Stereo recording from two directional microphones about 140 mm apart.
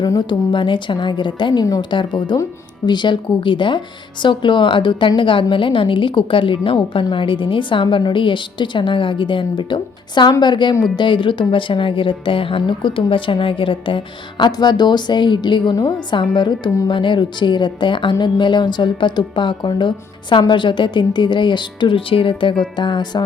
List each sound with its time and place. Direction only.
0.0 s speech: 30° left (ahead or behind)